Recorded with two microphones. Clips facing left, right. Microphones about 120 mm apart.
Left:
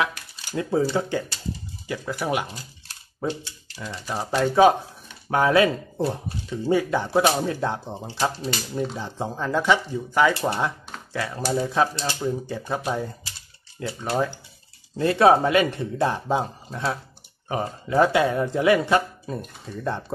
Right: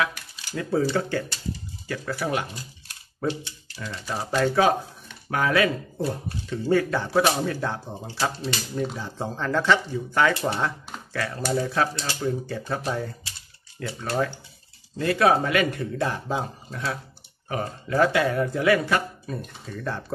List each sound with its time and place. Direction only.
0.6 s speech: 20° left (ahead or behind)
3.7 s speech: 15° left (ahead or behind)
6.5 s speech: 15° left (ahead or behind)